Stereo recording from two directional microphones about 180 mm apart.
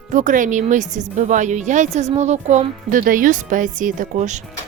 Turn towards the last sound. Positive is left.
turn(degrees=-45)  # may be behind; listen again after turning